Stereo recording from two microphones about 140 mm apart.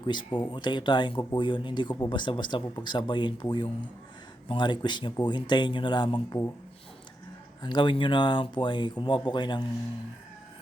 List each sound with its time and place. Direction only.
0.0 s speech: 35° left (ahead or behind)
4.4 s speech: 35° left (ahead or behind)
7.6 s speech: 35° left (ahead or behind)